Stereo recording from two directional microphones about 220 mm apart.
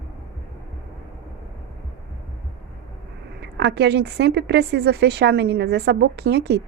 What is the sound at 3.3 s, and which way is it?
A woman's voice, 50° right (ahead or behind).